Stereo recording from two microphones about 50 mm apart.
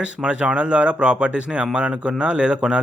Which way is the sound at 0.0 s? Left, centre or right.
Right.